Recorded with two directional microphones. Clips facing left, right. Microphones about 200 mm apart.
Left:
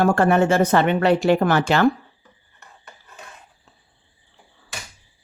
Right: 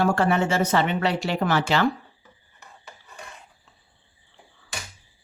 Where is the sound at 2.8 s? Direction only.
5° left (ahead or behind).